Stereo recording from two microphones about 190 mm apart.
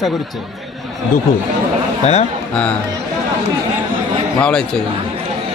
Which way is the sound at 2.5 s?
5° left (ahead or behind).